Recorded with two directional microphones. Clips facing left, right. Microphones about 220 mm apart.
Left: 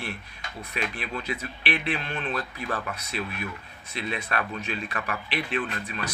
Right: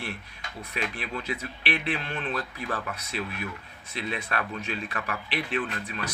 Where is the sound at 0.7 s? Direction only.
15° left (ahead or behind).